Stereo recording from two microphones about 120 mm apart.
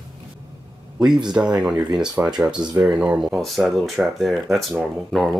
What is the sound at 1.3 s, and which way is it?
Speech, 5° right (ahead or behind).